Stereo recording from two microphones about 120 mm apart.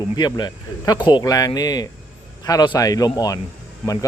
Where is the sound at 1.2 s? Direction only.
30° left (ahead or behind).